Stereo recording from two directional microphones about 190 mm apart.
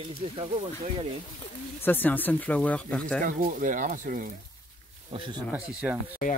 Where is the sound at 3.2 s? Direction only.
45° right (ahead or behind).